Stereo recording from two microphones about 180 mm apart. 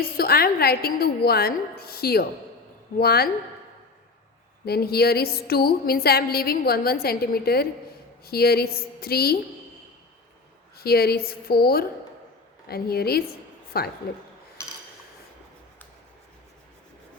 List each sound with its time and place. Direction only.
0.2 s a woman's voice: 55° left (ahead or behind)
4.6 s a woman's voice: 60° left (ahead or behind)
10.8 s a woman's voice: 60° left (ahead or behind)